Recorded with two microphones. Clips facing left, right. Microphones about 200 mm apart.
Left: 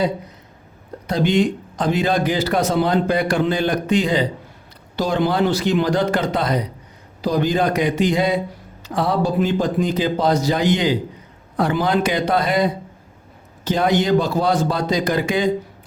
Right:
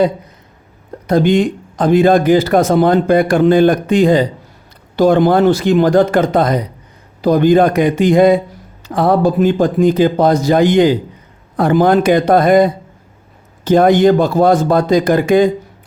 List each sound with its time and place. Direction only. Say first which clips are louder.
1.0 s speech: right 6 dB; 50° right (ahead or behind)